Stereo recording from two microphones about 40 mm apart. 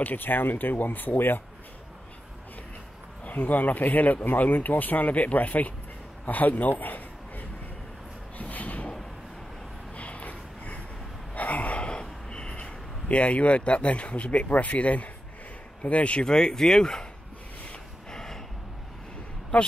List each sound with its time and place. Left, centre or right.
0.0 s speech: left
3.3 s a man's voice: left
8.4 s a sound: left
9.9 s a sound: left
12.6 s speech: left
16.3 s speech: centre
18.1 s gasp: centre
19.5 s speech: left